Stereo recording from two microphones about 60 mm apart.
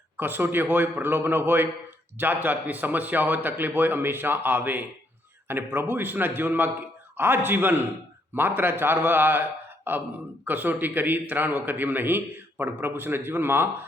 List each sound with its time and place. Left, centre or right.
0.2 s a man's voice: right